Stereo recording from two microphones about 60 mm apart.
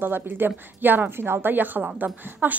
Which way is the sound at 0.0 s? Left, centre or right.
Right.